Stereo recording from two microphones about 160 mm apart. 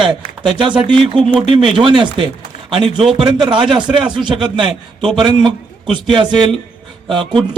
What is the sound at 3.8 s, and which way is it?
Speech, 5° right (ahead or behind).